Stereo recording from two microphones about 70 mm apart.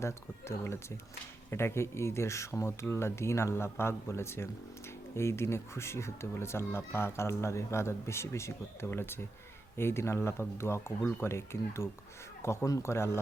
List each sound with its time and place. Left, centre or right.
0.0 s speech: left